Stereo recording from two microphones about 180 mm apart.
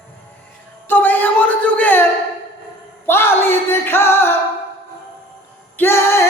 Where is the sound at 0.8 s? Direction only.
10° left (ahead or behind).